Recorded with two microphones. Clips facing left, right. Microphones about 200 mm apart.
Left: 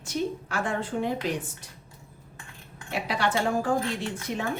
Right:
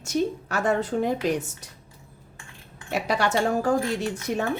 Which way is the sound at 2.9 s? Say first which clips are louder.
Right 3 dB; 45° right (ahead or behind).